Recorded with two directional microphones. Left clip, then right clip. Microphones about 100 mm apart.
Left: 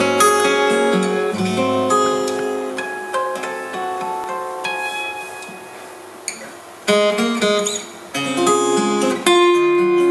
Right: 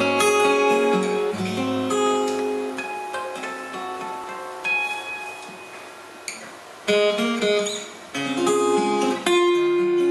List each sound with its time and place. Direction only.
0.0 s music: 20° left (ahead or behind)
6.9 s music: 25° left (ahead or behind)